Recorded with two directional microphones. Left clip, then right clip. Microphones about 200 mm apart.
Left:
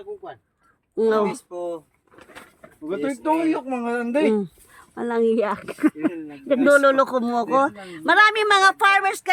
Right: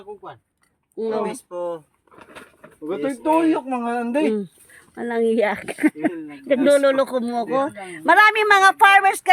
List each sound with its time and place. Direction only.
0.9 s speech: 40° left (ahead or behind)
1.2 s speech: 5° left (ahead or behind)
2.9 s speech: centre (ahead or behind)
4.9 s speech: 20° left (ahead or behind)
8.0 s speech: 5° left (ahead or behind)